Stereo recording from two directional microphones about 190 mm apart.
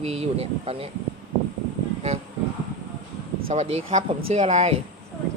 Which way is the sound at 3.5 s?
35° right (ahead or behind).